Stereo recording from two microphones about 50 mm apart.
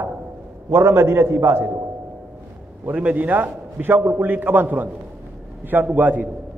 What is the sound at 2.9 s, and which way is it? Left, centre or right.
A man's voice, right.